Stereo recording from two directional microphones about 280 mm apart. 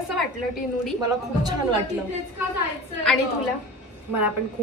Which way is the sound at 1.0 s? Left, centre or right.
Centre.